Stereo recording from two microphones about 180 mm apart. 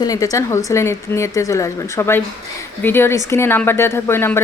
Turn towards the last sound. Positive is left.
turn(degrees=15)  # may be behind; listen again after turning